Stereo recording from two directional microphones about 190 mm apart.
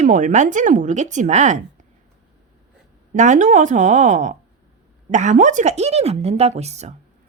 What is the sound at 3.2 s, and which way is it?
Speech, 40° right (ahead or behind).